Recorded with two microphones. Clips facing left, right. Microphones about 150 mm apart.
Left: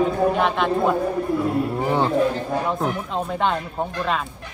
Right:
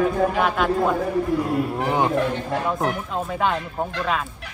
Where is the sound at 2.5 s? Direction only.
90° right.